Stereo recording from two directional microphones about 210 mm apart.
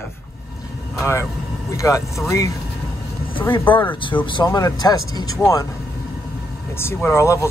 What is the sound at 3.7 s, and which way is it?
Speech, 25° left (ahead or behind).